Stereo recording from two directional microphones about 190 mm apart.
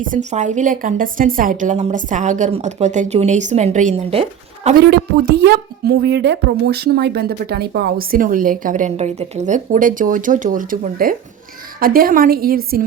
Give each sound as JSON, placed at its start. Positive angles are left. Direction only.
{"t": 0.1, "sound": "a woman's voice", "side_deg": -40}
{"t": 4.7, "sound": "a woman's voice", "side_deg": -60}